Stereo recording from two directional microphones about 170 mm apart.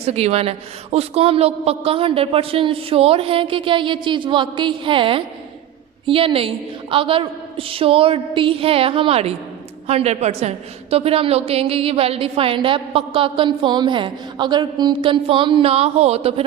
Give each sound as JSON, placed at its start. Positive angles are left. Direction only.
{"t": 0.0, "sound": "a woman's voice", "side_deg": -40}